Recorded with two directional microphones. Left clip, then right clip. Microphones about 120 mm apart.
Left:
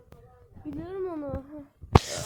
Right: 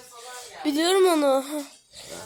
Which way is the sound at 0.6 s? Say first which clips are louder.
Right 15 dB; 45° right (ahead or behind).